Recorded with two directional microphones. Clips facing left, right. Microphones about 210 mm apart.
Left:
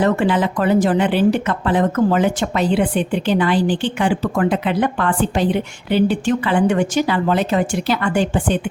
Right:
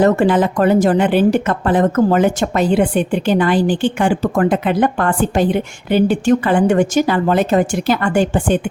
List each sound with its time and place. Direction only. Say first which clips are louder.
0.0 s a woman's voice: right 4 dB; 45° right (ahead or behind)